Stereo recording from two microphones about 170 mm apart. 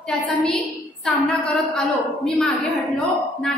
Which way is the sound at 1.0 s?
Centre (ahead or behind).